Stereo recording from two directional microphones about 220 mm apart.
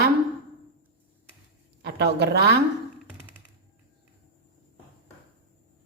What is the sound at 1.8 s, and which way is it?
Speech, 50° right (ahead or behind).